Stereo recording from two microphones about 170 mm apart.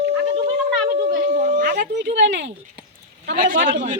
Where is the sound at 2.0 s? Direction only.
90° right.